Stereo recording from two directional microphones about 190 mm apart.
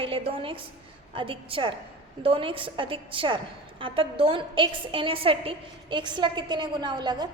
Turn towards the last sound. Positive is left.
turn(degrees=-20)  # may be behind; listen again after turning